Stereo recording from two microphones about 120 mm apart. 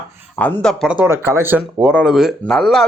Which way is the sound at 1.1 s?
20° right (ahead or behind).